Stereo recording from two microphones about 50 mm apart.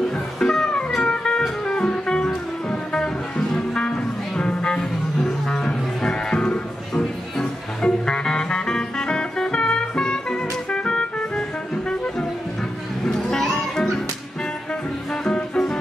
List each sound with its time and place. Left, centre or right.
0.1 s music: centre
15.2 s music: centre